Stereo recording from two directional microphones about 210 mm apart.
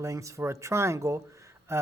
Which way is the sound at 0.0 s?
15° right (ahead or behind).